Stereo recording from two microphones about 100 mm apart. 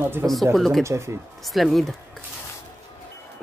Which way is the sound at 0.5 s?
5° left (ahead or behind).